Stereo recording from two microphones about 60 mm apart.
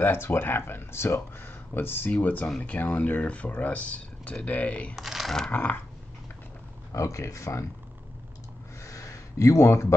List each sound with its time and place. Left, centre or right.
0.0 s speech: left
4.9 s speech: centre
5.5 s speech: left
6.9 s speech: left
8.8 s a sound: left